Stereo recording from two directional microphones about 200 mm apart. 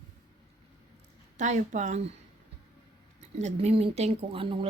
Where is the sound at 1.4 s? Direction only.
40° right (ahead or behind).